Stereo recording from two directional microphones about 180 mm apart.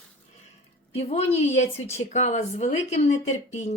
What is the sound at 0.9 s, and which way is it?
A woman's voice, 35° left (ahead or behind).